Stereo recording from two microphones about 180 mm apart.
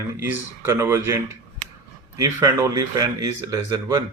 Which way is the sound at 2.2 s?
15° right (ahead or behind).